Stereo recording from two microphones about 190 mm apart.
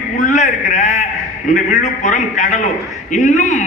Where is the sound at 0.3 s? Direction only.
40° left (ahead or behind).